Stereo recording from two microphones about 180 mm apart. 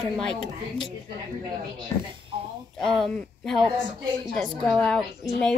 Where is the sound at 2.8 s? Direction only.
Centre (ahead or behind).